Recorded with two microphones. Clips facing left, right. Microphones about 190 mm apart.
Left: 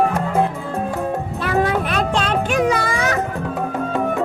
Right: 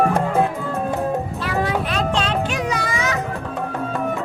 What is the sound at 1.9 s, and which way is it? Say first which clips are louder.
Music: left 2 dB; 55° left (ahead or behind).